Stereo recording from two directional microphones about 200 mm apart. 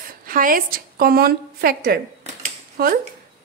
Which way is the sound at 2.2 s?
40° right (ahead or behind).